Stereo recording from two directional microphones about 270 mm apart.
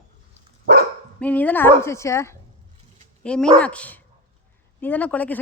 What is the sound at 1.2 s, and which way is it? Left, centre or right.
A woman's voice, centre.